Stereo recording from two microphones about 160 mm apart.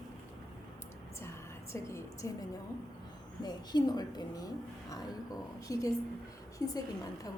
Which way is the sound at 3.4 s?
25° left (ahead or behind).